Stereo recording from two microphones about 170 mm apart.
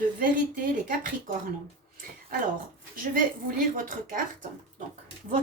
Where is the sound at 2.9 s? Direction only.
55° right (ahead or behind).